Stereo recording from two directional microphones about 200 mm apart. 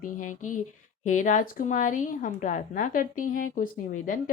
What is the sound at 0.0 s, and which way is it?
A woman's voice, 40° left (ahead or behind).